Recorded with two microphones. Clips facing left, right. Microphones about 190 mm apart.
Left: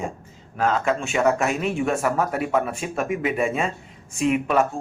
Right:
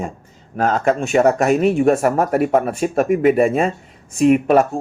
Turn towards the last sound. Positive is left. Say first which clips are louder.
# right 7 dB
turn(degrees=-45)  # may be behind; listen again after turning